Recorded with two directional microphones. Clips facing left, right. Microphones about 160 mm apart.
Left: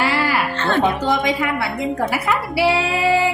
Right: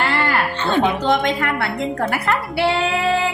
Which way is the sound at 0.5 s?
20° right (ahead or behind).